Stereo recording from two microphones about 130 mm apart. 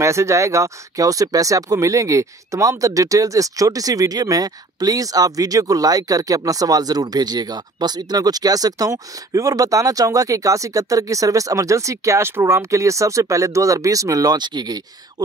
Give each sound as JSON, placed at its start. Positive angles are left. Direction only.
{"t": 0.0, "sound": "speech", "side_deg": -20}